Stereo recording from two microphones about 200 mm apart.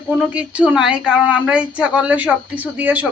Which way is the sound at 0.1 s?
5° right (ahead or behind).